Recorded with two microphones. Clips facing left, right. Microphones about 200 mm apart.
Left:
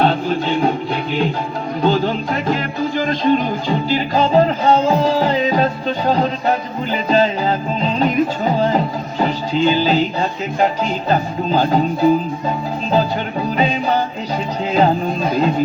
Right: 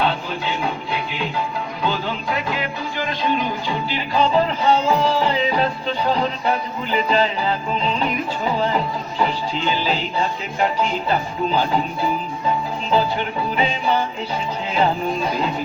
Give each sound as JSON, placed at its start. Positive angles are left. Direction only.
{"t": 0.0, "sound": "music", "side_deg": 45}
{"t": 1.8, "sound": "music", "side_deg": 45}
{"t": 13.6, "sound": "music", "side_deg": 40}